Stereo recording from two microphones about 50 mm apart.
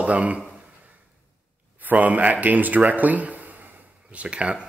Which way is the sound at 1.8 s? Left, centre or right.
Right.